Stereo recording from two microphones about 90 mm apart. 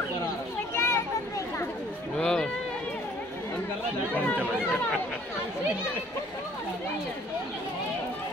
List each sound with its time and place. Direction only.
0.7 s children playing: 30° left (ahead or behind)
2.1 s run: 10° left (ahead or behind)